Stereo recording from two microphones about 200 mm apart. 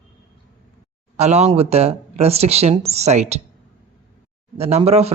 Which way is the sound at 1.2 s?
35° right (ahead or behind).